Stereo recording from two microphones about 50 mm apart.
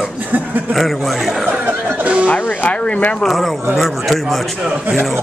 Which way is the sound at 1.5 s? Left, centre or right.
Right.